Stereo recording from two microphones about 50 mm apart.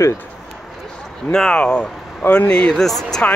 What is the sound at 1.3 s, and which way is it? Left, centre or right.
Speech, centre.